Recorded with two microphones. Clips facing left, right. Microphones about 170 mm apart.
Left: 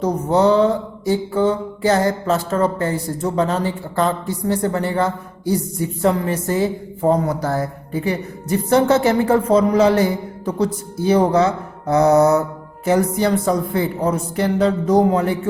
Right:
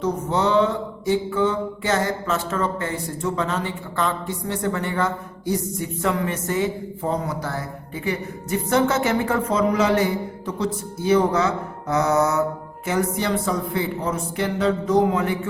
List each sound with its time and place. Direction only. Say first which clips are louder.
0.0 s mantra: left 6 dB; 40° left (ahead or behind)
7.9 s mantra: left 5 dB; 35° left (ahead or behind)